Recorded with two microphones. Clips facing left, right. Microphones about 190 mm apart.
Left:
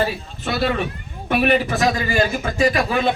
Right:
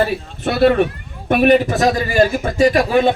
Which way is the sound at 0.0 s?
60° right (ahead or behind).